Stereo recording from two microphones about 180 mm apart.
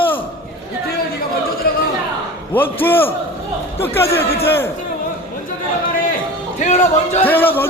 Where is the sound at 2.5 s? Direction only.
10° left (ahead or behind).